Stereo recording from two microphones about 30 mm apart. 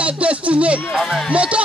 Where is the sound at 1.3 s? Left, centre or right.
Right.